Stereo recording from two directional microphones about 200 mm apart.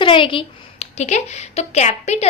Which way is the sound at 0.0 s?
25° left (ahead or behind).